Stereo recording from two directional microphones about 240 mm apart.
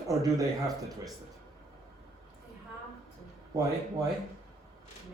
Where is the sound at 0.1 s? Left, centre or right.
Centre.